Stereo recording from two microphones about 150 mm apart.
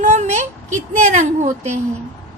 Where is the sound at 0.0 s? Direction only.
50° right (ahead or behind).